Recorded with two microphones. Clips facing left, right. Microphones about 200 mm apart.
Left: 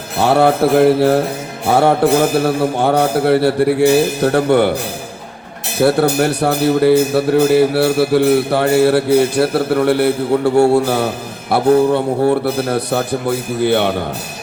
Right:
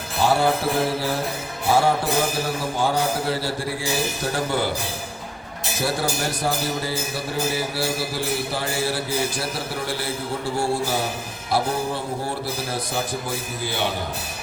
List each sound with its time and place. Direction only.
0.2 s music: 65° left (ahead or behind)
5.8 s music: 65° left (ahead or behind)